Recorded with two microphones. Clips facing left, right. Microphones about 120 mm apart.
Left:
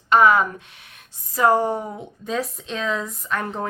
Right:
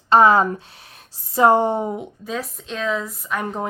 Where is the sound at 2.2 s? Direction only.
Centre (ahead or behind).